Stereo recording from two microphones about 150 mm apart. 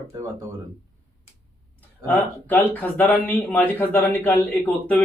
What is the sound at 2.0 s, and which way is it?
Speech, 15° left (ahead or behind).